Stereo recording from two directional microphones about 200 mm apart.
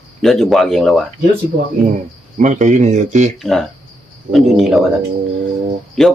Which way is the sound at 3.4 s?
Centre (ahead or behind).